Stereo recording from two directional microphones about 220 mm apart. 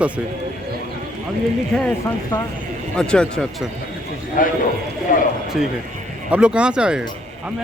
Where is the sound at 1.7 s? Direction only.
Centre (ahead or behind).